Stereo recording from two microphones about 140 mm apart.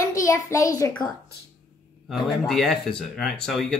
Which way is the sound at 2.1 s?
Centre (ahead or behind).